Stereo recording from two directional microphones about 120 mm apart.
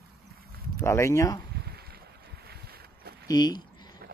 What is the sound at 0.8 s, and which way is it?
Speech, 25° left (ahead or behind).